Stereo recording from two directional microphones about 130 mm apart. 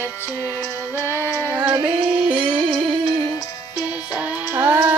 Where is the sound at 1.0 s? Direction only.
20° left (ahead or behind).